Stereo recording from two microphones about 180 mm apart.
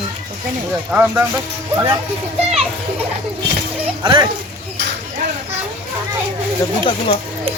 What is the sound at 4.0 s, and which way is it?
Speech, 25° right (ahead or behind).